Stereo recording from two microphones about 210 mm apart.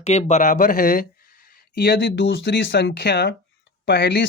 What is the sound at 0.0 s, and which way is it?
Speech, 30° left (ahead or behind).